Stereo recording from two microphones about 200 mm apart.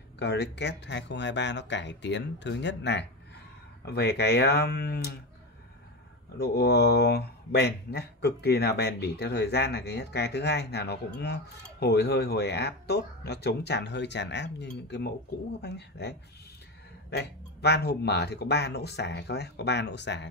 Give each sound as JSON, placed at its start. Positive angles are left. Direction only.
{"t": 0.2, "sound": "speech", "side_deg": 55}
{"t": 6.3, "sound": "speech", "side_deg": 55}